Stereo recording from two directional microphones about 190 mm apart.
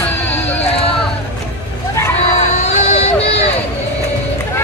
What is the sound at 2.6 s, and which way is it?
Run, 35° left (ahead or behind).